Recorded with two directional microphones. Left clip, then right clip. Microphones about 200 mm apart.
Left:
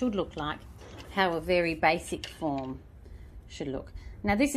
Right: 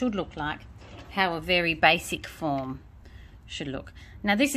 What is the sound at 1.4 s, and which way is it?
A woman's voice, 30° right (ahead or behind).